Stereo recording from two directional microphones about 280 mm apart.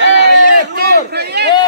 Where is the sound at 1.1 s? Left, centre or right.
Right.